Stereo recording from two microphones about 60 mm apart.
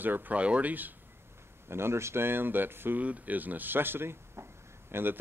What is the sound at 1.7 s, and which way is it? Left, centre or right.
Speech, right.